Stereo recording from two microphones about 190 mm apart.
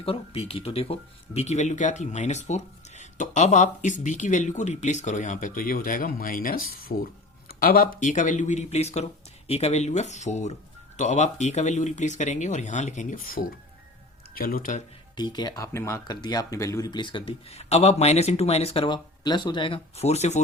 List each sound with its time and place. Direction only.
0.0 s speech: 30° left (ahead or behind)
15.1 s speech: 25° left (ahead or behind)